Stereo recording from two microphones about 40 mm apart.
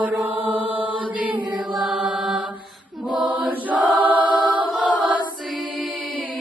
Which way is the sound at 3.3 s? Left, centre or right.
Right.